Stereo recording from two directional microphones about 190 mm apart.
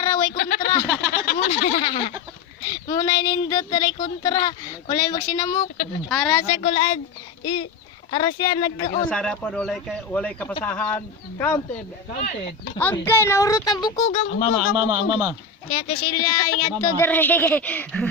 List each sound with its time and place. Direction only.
0.0 s a sound: 20° left (ahead or behind)
0.3 s a sound: 50° left (ahead or behind)
1.6 s speech: 30° left (ahead or behind)
5.6 s speech: 45° left (ahead or behind)
6.1 s speech: 5° left (ahead or behind)
6.4 s speech: 35° left (ahead or behind)
9.0 s speech: 5° left (ahead or behind)
12.8 s speech: 10° left (ahead or behind)
14.0 s speech: 40° left (ahead or behind)
15.1 s speech: 15° right (ahead or behind)
15.7 s speech: 30° left (ahead or behind)
16.2 s speech: 20° left (ahead or behind)